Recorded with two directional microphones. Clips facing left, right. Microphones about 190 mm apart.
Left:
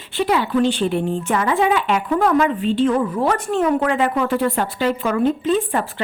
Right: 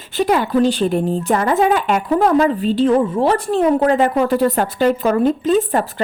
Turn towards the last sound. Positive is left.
turn(degrees=-40)  # may be behind; listen again after turning